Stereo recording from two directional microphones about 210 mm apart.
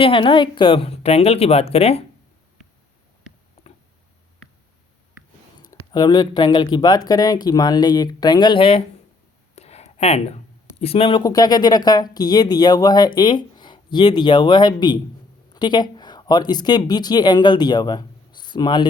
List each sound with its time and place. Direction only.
0.0 s speech: 25° left (ahead or behind)
3.6 s tick: 30° left (ahead or behind)
5.9 s speech: 20° left (ahead or behind)